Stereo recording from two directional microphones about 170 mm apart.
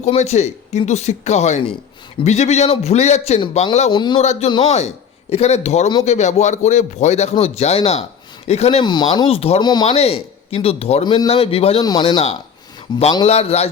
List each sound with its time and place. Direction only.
0.0 s speech: 40° left (ahead or behind)
3.9 s speech: 25° left (ahead or behind)
4.2 s speech: 40° left (ahead or behind)
8.8 s speech: 25° left (ahead or behind)
11.8 s speech: 25° left (ahead or behind)